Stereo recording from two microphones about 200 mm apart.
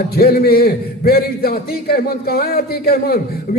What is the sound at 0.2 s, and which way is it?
A man's voice, 50° left (ahead or behind).